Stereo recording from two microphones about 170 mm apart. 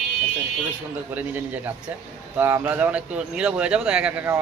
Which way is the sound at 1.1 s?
10° right (ahead or behind).